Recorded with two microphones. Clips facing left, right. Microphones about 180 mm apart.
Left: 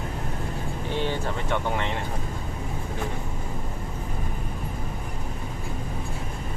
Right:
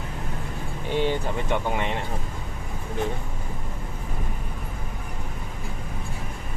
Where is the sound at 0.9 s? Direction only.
15° right (ahead or behind).